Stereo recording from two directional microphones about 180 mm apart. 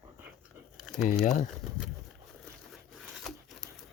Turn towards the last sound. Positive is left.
turn(degrees=0)  # may be behind; listen again after turning